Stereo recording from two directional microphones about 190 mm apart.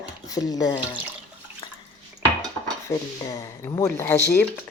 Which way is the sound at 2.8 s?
15° left (ahead or behind).